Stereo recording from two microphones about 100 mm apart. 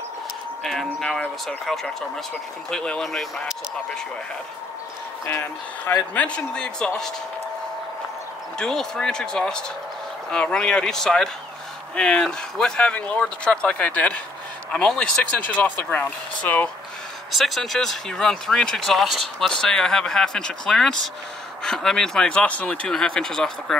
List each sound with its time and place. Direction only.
0.9 s speech: 5° left (ahead or behind)
5.2 s speech: 25° left (ahead or behind)
6.1 s speech: 10° left (ahead or behind)
8.5 s speech: 5° left (ahead or behind)
17.3 s speech: centre (ahead or behind)